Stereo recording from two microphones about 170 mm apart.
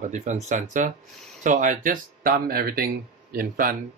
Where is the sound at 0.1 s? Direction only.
45° right (ahead or behind).